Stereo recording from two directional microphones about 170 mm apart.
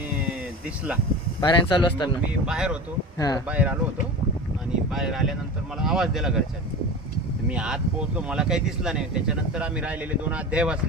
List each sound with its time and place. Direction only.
1.4 s speech: 30° left (ahead or behind)
2.5 s speech: 5° right (ahead or behind)
3.2 s speech: 20° left (ahead or behind)
3.5 s speech: 10° right (ahead or behind)
4.9 s speech: centre (ahead or behind)
7.4 s speech: 5° right (ahead or behind)